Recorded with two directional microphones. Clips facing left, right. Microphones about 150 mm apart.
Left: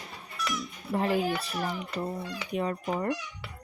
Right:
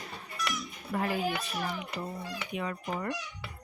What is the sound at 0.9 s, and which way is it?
Speech, 25° left (ahead or behind).